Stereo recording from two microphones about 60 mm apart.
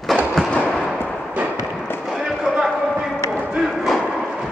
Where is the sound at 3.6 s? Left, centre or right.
Centre.